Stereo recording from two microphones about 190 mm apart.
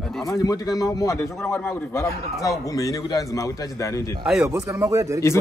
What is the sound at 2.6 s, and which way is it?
Speech, 20° left (ahead or behind).